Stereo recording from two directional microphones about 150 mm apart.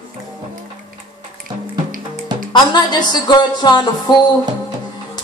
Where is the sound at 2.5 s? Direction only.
30° left (ahead or behind).